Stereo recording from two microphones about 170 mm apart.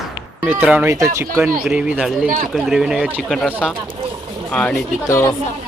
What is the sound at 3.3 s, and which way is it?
A man's voice, 5° left (ahead or behind).